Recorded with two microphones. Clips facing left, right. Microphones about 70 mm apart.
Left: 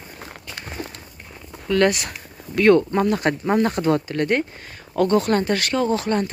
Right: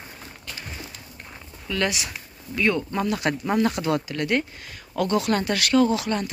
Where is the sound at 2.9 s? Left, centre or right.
Left.